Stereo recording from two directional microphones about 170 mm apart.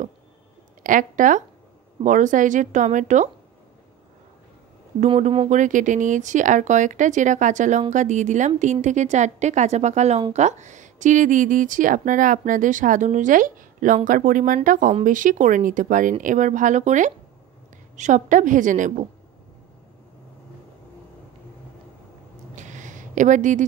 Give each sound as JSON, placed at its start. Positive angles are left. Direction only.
{"t": 0.8, "sound": "speech", "side_deg": -50}
{"t": 5.0, "sound": "speech", "side_deg": -35}
{"t": 5.5, "sound": "speech", "side_deg": -45}
{"t": 22.6, "sound": "a sound", "side_deg": -45}